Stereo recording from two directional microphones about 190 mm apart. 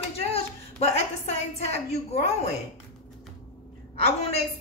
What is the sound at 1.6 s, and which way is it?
Speech, 35° left (ahead or behind).